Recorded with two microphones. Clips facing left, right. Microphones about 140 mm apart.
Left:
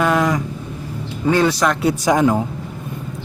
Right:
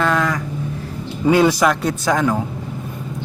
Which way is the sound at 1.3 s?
10° right (ahead or behind).